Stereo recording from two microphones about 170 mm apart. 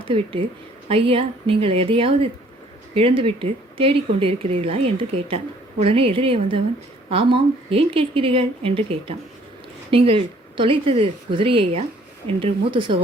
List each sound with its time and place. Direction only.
0.0 s a woman's voice: 30° right (ahead or behind)